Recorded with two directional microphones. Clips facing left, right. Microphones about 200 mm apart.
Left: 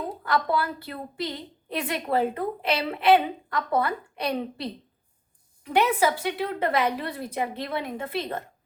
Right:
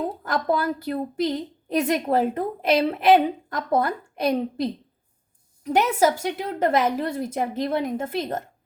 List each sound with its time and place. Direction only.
0.3 s a woman's voice: 45° right (ahead or behind)